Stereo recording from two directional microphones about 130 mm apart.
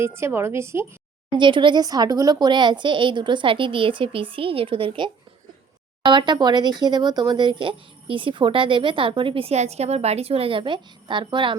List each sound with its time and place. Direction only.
0.0 s a woman's voice: 20° right (ahead or behind)
1.4 s speech: 40° right (ahead or behind)